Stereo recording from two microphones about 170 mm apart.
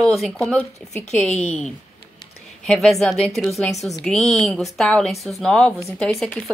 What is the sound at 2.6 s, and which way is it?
Speech, 5° left (ahead or behind).